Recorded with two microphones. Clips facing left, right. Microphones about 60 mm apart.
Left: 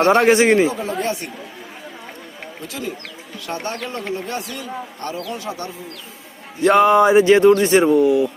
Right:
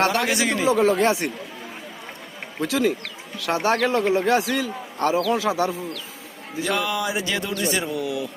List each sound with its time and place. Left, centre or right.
0.3 s speech: left
0.7 s speech: right
2.6 s a man's voice: right
6.7 s speech: left